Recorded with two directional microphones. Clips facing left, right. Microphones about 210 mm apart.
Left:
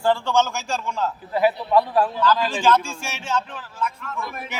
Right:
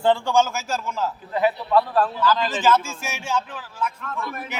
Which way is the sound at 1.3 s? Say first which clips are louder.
Left 1 dB; 10° left (ahead or behind).